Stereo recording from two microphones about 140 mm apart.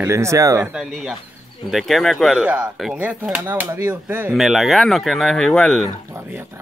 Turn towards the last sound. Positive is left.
turn(degrees=5)  # may be behind; listen again after turning